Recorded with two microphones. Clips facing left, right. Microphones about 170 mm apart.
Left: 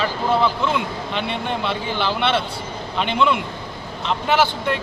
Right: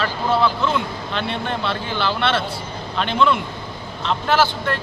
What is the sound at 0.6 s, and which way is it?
Speech, 15° left (ahead or behind).